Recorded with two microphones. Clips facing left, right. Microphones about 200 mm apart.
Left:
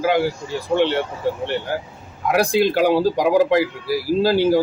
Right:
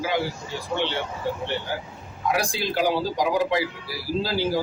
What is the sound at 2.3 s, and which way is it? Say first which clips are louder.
A man's voice: left 8 dB; 60° left (ahead or behind).